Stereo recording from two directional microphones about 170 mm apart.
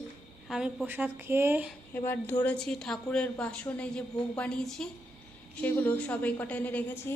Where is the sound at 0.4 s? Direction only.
Centre (ahead or behind).